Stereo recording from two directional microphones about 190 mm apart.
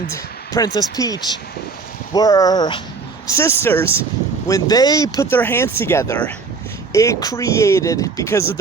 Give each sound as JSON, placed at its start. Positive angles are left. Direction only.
{"t": 0.1, "sound": "speech", "side_deg": 20}